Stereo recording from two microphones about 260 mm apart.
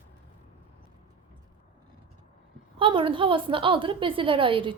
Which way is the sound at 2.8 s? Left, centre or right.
Centre.